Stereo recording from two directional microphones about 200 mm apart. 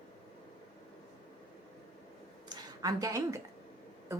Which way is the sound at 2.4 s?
20° right (ahead or behind).